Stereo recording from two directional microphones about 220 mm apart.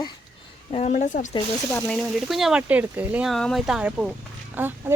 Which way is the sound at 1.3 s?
10° left (ahead or behind).